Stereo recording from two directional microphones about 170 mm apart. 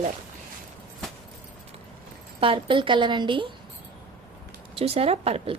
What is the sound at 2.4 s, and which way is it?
A woman's voice, 30° right (ahead or behind).